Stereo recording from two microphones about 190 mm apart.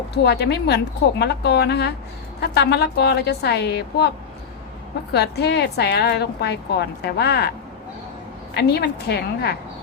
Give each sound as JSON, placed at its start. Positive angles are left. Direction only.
{"t": 0.1, "sound": "a woman's voice", "side_deg": 60}
{"t": 5.1, "sound": "a woman's voice", "side_deg": 60}
{"t": 8.5, "sound": "a woman's voice", "side_deg": 60}